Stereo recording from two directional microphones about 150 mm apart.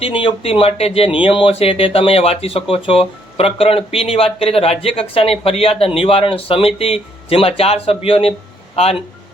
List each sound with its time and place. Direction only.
0.0 s speech: 35° left (ahead or behind)